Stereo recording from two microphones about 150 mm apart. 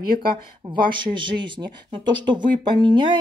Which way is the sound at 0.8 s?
30° right (ahead or behind).